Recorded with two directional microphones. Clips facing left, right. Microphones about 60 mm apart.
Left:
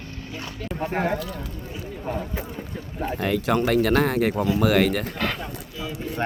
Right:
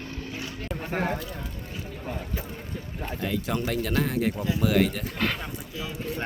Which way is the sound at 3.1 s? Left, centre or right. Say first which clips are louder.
Left 6 dB; left.